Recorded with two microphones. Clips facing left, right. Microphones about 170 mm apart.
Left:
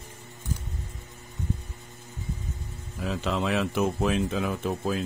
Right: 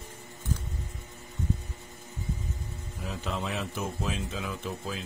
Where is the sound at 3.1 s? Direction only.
90° left; by 5.0 s 50° left (ahead or behind).